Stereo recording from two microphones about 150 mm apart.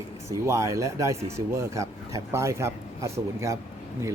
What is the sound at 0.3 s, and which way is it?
Speech, 20° right (ahead or behind).